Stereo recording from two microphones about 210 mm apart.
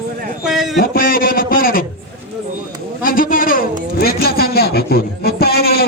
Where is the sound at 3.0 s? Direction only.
40° left (ahead or behind).